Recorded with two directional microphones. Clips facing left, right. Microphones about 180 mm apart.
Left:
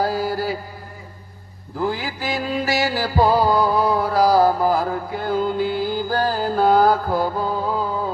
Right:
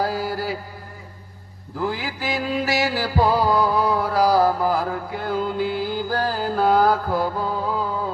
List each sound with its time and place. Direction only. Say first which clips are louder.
0.0 s mantra: left 3 dB; 30° left (ahead or behind)
1.8 s music: left 2 dB; 35° left (ahead or behind)